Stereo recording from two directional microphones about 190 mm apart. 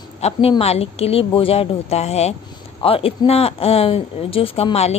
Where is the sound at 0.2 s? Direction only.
30° left (ahead or behind).